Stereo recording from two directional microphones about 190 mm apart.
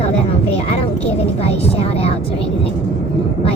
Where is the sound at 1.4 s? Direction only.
30° left (ahead or behind).